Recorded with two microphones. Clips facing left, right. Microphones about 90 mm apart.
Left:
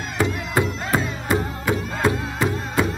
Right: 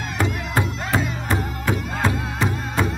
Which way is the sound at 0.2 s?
5° left (ahead or behind).